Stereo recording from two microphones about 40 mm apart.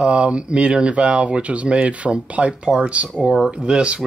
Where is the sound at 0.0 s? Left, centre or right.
Right.